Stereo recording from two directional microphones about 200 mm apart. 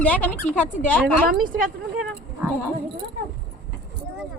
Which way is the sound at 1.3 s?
45° right (ahead or behind).